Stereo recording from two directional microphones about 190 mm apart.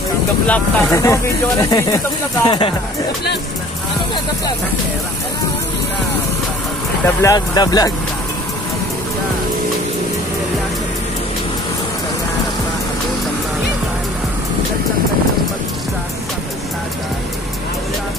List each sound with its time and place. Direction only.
0.5 s speech: 15° left (ahead or behind)
7.1 s speech: 15° left (ahead or behind)